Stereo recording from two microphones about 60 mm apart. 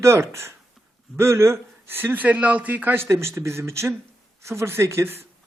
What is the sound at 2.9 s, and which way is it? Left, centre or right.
Speech, right.